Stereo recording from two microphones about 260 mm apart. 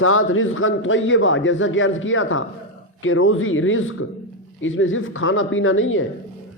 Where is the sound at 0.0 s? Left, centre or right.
Left.